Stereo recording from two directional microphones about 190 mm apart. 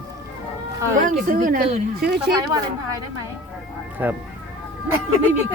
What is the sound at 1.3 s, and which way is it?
Speech, 45° right (ahead or behind).